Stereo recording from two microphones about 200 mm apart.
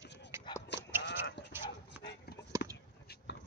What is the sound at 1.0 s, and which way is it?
Horse, 60° left (ahead or behind).